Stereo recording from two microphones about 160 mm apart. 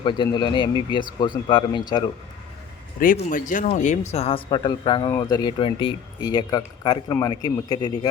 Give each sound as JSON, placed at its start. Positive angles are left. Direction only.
{"t": 0.0, "sound": "speech", "side_deg": 30}
{"t": 3.0, "sound": "speech", "side_deg": 60}